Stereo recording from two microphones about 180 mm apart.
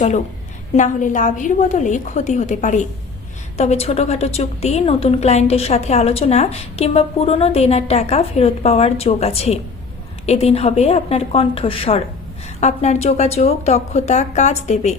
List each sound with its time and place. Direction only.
0.8 s a woman's voice: 45° left (ahead or behind)